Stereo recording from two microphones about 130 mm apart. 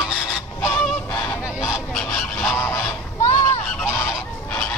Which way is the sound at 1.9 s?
5° left (ahead or behind).